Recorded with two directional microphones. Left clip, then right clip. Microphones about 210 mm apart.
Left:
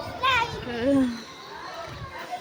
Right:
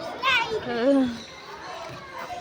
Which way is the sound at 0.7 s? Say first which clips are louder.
Right 2 dB; centre (ahead or behind).